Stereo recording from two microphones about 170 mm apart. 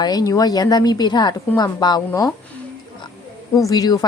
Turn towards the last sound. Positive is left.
turn(degrees=20)  # may be behind; listen again after turning